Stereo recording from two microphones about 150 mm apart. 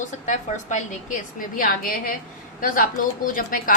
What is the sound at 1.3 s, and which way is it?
A woman's voice, 65° left (ahead or behind).